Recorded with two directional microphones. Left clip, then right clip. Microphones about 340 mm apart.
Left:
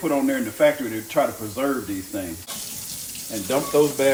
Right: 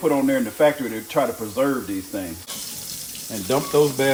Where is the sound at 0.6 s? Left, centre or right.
Right.